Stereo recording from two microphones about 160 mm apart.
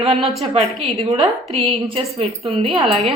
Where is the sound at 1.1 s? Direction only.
35° right (ahead or behind).